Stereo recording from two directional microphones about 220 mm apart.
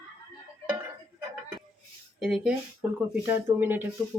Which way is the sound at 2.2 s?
5° right (ahead or behind).